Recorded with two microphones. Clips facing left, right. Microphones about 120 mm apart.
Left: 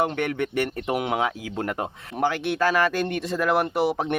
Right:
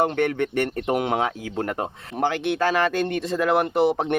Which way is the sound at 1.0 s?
35° right (ahead or behind).